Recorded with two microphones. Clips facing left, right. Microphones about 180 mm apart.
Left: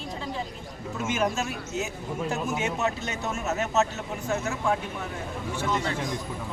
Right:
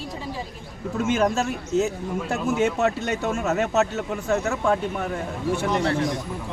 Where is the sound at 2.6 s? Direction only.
55° right (ahead or behind).